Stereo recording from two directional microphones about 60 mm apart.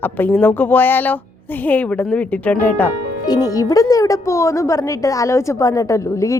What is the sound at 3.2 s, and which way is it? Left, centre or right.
Speech, left.